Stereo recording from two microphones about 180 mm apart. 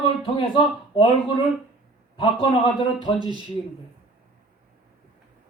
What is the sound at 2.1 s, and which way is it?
Speech, 30° left (ahead or behind).